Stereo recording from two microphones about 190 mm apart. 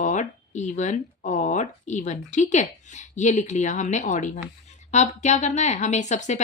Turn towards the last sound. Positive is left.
turn(degrees=40)  # may be behind; listen again after turning